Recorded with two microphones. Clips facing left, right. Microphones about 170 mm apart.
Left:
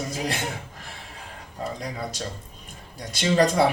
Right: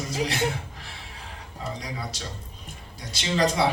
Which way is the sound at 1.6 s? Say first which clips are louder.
Left 3 dB; 50° left (ahead or behind).